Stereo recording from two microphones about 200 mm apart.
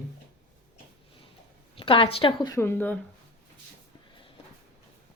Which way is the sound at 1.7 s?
25° left (ahead or behind).